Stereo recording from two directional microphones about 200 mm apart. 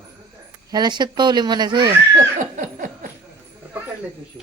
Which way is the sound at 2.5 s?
40° right (ahead or behind).